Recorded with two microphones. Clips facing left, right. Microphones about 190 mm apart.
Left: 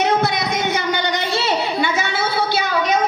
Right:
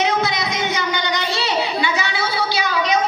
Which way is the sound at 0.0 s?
55° left (ahead or behind).